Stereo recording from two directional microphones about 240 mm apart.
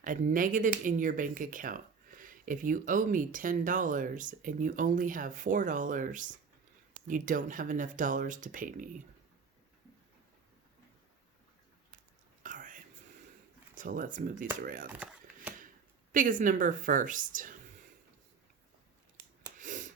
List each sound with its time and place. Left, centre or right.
0.0 s speech: right
12.4 s whispering: right
13.7 s speech: right
14.9 s a sound: centre
16.1 s speech: right
19.4 s a sound: right